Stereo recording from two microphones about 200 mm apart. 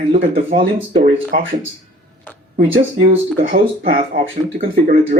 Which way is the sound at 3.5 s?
45° right (ahead or behind).